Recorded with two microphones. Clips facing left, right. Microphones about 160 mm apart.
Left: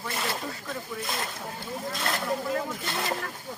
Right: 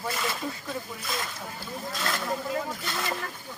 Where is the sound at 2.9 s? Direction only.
30° left (ahead or behind).